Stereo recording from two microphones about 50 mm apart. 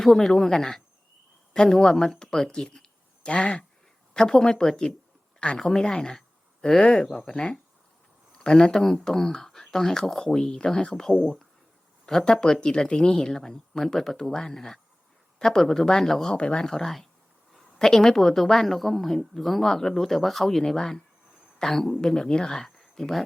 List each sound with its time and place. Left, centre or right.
0.0 s speech: centre
2.8 s a sound: left
4.1 s speech: centre
10.9 s speech: centre
12.0 s a woman's voice: centre